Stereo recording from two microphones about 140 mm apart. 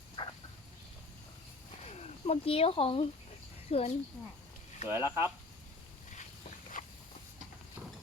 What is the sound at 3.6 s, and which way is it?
Speech, 50° left (ahead or behind).